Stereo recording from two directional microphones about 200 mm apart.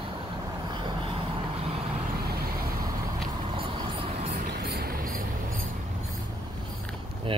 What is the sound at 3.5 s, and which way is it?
Vehicle, 30° right (ahead or behind).